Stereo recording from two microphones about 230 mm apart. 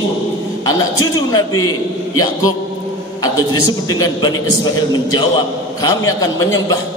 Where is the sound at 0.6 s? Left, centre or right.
Centre.